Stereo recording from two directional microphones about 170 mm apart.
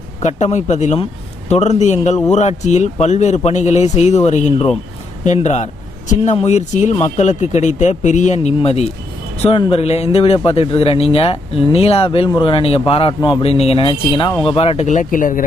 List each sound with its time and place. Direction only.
0.2 s speech: 40° left (ahead or behind)